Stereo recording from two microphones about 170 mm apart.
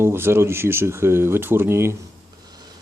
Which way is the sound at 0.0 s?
15° right (ahead or behind).